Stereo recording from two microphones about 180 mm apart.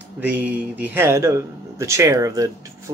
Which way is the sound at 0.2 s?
10° right (ahead or behind).